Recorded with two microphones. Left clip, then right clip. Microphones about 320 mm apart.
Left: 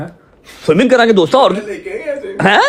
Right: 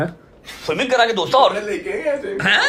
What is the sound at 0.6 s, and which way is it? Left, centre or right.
A man's voice, left.